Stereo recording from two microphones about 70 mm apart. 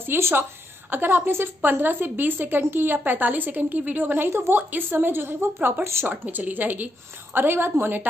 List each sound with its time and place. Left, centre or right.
0.0 s a woman's voice: right